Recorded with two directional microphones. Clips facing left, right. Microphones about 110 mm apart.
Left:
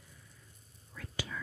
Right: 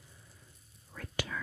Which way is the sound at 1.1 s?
65° right (ahead or behind).